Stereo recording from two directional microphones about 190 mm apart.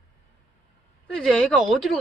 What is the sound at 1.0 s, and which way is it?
Speech, 5° left (ahead or behind).